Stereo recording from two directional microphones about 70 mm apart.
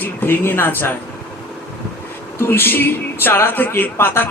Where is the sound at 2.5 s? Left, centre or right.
Left.